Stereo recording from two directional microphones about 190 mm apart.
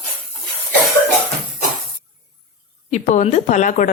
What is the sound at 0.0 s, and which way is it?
Cough, centre (ahead or behind).